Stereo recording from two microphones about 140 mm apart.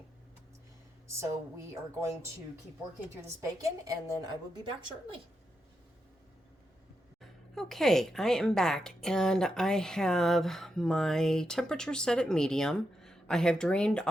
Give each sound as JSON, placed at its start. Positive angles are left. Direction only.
{"t": 1.7, "sound": "a woman's voice", "side_deg": -20}
{"t": 3.4, "sound": "a woman's voice", "side_deg": -25}
{"t": 7.2, "sound": "a woman's voice", "side_deg": 0}